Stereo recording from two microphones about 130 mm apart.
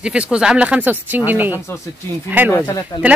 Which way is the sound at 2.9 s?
30° left (ahead or behind).